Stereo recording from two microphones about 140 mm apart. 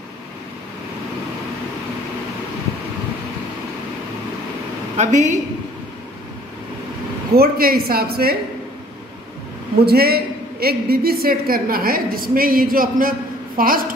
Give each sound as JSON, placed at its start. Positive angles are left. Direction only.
{"t": 4.9, "sound": "a woman's voice", "side_deg": -55}
{"t": 7.3, "sound": "a woman's voice", "side_deg": -90}
{"t": 9.8, "sound": "a woman's voice", "side_deg": -90}